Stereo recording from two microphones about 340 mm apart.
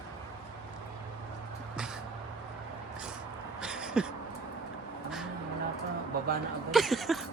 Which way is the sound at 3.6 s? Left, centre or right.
Centre.